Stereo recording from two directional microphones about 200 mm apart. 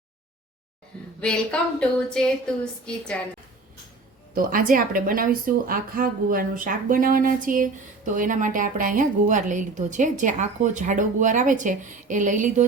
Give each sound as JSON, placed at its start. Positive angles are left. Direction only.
{"t": 1.2, "sound": "speech", "side_deg": 5}
{"t": 4.4, "sound": "speech", "side_deg": -40}